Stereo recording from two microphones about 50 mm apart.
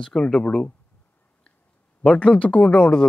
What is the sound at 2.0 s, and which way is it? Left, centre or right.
Speech, left.